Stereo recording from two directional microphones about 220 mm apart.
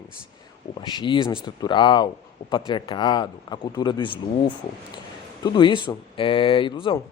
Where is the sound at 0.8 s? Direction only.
20° left (ahead or behind).